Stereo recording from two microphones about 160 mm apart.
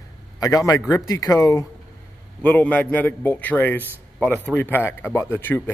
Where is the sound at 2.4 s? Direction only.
10° left (ahead or behind).